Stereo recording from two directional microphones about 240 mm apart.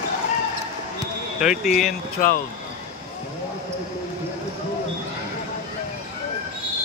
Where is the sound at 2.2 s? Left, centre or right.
Left.